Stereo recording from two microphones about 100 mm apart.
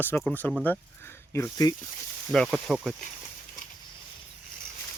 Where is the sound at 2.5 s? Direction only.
5° right (ahead or behind).